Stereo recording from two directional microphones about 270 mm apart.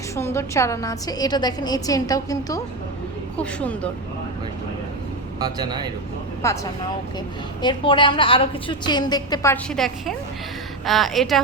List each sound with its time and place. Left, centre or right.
0.2 s a woman's voice: centre
5.4 s a man's voice: centre
6.4 s a woman's voice: centre
7.6 s a woman's voice: centre